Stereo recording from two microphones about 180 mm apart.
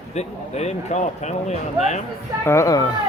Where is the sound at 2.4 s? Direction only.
15° left (ahead or behind).